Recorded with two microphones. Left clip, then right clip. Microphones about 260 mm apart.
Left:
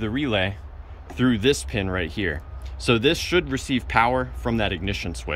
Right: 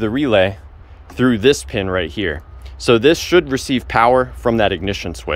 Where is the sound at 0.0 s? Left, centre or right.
Centre.